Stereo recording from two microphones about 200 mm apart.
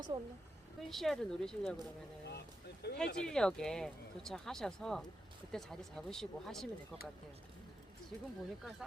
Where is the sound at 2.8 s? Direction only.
55° left (ahead or behind).